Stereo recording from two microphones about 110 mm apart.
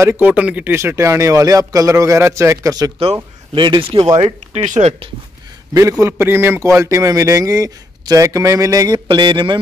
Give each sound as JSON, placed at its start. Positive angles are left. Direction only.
{"t": 0.0, "sound": "a man's voice", "side_deg": -20}
{"t": 3.5, "sound": "mantra", "side_deg": -45}
{"t": 4.6, "sound": "speech", "side_deg": -85}
{"t": 5.7, "sound": "a man's voice", "side_deg": -30}
{"t": 9.0, "sound": "mantra", "side_deg": -45}